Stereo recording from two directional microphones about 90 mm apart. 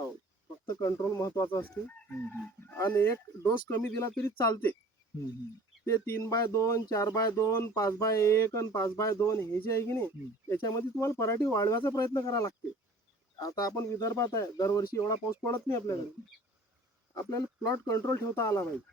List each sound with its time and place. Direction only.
0.7 s speech: 45° left (ahead or behind)
1.1 s speech: 35° left (ahead or behind)
1.6 s chicken: 20° left (ahead or behind)
5.8 s speech: 30° left (ahead or behind)
13.7 s speech: 35° left (ahead or behind)
15.5 s chicken: 30° left (ahead or behind)
17.2 s speech: 40° left (ahead or behind)